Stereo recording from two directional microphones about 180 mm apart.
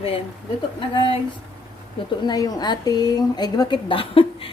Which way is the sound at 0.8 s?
30° left (ahead or behind).